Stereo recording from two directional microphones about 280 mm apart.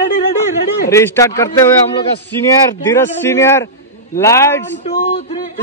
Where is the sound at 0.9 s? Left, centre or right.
Centre.